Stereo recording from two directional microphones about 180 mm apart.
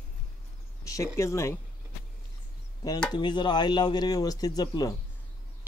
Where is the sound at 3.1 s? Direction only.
25° left (ahead or behind).